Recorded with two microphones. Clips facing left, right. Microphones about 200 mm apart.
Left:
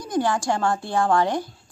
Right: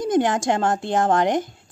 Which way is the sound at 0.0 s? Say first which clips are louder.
Right 4 dB; 20° right (ahead or behind).